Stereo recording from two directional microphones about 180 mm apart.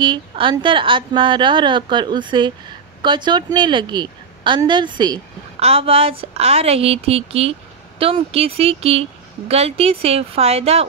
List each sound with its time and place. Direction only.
0.0 s a woman's voice: 25° right (ahead or behind)